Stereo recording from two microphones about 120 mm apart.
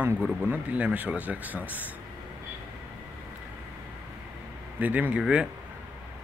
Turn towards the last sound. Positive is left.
turn(degrees=-10)  # may be behind; listen again after turning